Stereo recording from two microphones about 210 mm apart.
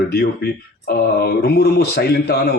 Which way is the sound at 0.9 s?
50° left (ahead or behind).